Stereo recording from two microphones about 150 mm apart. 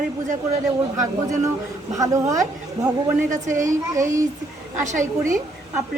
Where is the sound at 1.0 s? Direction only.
20° right (ahead or behind).